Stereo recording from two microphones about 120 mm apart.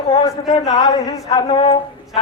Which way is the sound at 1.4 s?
50° left (ahead or behind).